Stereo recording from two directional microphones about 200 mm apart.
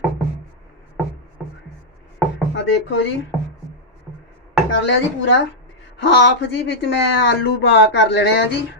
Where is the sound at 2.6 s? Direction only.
65° left (ahead or behind).